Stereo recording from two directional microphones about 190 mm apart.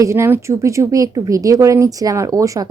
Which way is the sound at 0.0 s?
15° right (ahead or behind).